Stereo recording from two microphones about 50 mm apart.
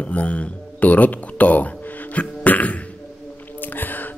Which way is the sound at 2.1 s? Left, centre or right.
Left.